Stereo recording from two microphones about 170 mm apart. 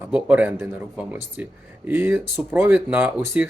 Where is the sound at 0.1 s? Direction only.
10° right (ahead or behind).